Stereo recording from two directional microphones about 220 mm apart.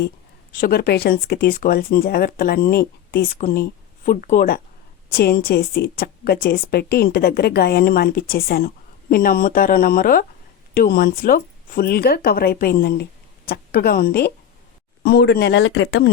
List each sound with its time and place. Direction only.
0.6 s a woman's voice: 45° left (ahead or behind)